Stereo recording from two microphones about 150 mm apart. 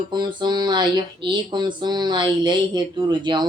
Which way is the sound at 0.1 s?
30° right (ahead or behind).